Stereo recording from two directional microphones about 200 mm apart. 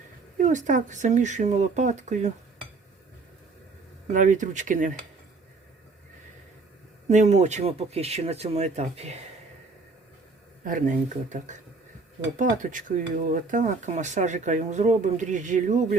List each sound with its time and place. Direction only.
0.3 s speech: 40° right (ahead or behind)
4.1 s speech: 40° right (ahead or behind)
7.1 s speech: 35° right (ahead or behind)
10.6 s speech: 40° right (ahead or behind)